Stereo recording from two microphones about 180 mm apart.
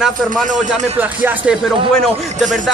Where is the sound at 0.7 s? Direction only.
40° right (ahead or behind).